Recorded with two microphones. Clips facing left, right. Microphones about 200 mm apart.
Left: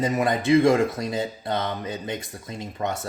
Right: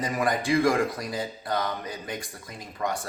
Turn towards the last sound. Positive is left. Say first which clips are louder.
# left 2 dB
turn(degrees=25)  # may be behind; listen again after turning